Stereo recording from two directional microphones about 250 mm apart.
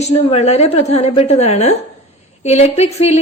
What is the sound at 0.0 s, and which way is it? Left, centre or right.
A woman's voice, left.